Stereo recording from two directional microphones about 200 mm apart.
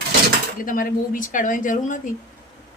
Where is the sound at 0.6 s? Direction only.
45° left (ahead or behind).